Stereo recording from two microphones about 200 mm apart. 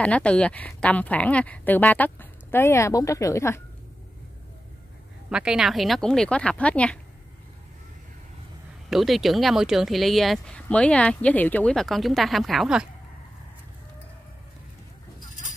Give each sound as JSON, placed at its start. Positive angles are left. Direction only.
{"t": 0.0, "sound": "speech", "side_deg": 5}
{"t": 5.3, "sound": "speech", "side_deg": -5}
{"t": 8.9, "sound": "speech", "side_deg": 0}
{"t": 15.1, "sound": "zipper", "side_deg": 40}